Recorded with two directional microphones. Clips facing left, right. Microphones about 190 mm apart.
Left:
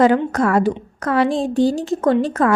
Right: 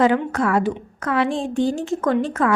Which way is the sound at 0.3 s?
40° left (ahead or behind).